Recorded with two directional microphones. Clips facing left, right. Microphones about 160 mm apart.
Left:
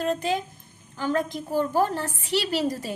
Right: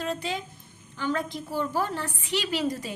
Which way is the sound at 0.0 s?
45° left (ahead or behind).